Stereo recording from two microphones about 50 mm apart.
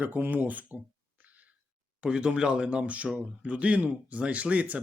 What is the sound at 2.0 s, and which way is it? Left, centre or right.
Speech, centre.